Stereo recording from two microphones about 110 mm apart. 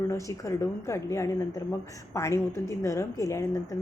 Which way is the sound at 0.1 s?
30° left (ahead or behind).